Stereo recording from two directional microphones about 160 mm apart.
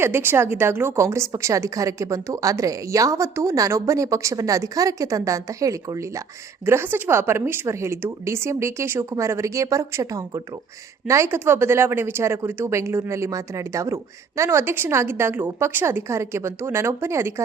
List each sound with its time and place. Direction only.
0.0 s a woman's voice: 15° right (ahead or behind)